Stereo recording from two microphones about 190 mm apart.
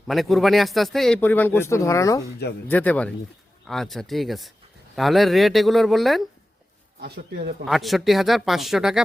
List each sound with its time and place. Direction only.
0.1 s speech: centre (ahead or behind)
7.0 s speech: 60° right (ahead or behind)
7.6 s speech: centre (ahead or behind)